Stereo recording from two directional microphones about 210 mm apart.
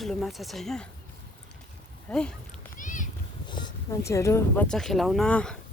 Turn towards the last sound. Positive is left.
turn(degrees=5)  # may be behind; listen again after turning